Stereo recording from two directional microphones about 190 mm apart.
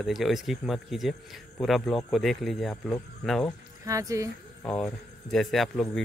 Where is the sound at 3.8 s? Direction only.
15° right (ahead or behind).